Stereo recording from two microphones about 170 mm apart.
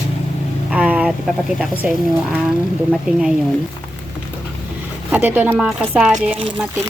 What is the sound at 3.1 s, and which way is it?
Speech, 5° right (ahead or behind).